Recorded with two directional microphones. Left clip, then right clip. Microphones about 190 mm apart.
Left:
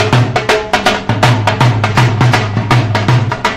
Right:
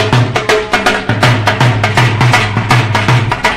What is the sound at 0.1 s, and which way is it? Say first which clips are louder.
Music: right 1 dB; 40° right (ahead or behind).